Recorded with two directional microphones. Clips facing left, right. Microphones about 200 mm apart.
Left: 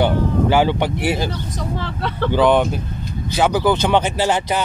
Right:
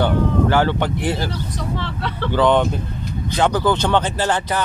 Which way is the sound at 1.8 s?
45° left (ahead or behind).